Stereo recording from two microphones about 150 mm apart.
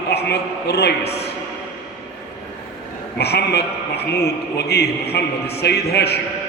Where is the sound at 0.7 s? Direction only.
90° left.